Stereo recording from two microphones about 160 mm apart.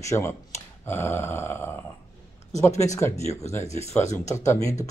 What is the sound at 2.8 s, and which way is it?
Speech, 20° left (ahead or behind).